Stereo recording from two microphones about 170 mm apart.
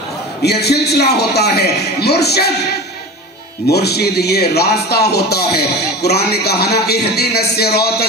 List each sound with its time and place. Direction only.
0.4 s a man's voice: 70° left (ahead or behind)
3.6 s a man's voice: 70° left (ahead or behind)